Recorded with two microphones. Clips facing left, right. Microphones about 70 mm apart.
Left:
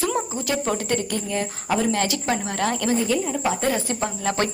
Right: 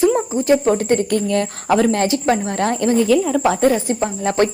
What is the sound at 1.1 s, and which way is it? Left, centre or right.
Speech, right.